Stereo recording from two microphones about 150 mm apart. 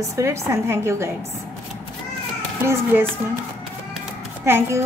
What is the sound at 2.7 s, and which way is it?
Speech, 15° right (ahead or behind).